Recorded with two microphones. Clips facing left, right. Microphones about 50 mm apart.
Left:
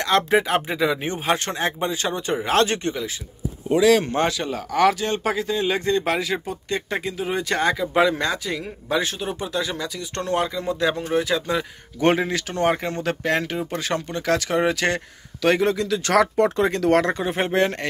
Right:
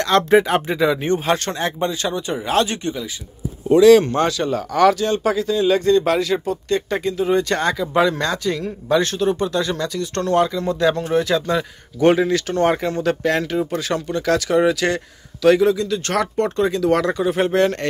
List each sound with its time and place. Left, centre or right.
0.0 s speech: centre
2.0 s speech: left
3.6 s speech: centre
4.1 s speech: left
5.0 s speech: left; by 11.6 s centre
12.0 s speech: left
15.7 s speech: left
16.9 s speech: left